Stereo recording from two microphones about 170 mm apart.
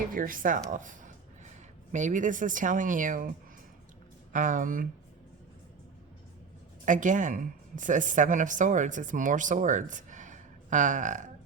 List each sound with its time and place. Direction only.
0.1 s speech: 55° right (ahead or behind)
6.8 s speech: 50° right (ahead or behind)